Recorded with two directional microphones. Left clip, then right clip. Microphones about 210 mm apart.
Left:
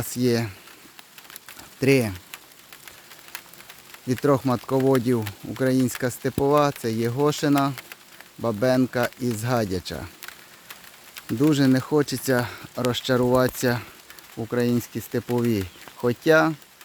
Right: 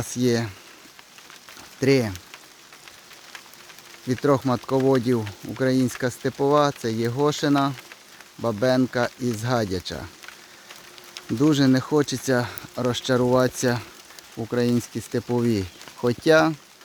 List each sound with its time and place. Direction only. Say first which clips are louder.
0.0 s speech: even; centre (ahead or behind)
1.8 s speech: even; 10° left (ahead or behind)
4.1 s speech: even; 10° left (ahead or behind)
11.3 s speech: right 1 dB; centre (ahead or behind)